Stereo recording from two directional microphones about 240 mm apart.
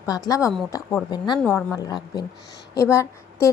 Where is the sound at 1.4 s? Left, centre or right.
Centre.